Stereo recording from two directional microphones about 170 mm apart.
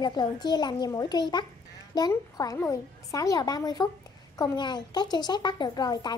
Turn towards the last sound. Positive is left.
turn(degrees=25)  # may be behind; listen again after turning